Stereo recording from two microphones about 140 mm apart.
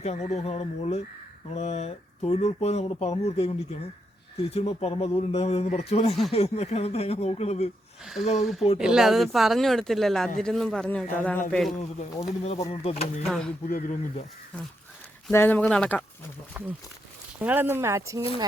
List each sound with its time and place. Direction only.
0.0 s speech: 50° left (ahead or behind)
8.4 s speech: centre (ahead or behind)
12.4 s speech: 50° left (ahead or behind)
13.2 s speech: centre (ahead or behind)
13.7 s speech: 70° left (ahead or behind)
15.3 s speech: 15° left (ahead or behind)
16.6 s speech: 15° right (ahead or behind)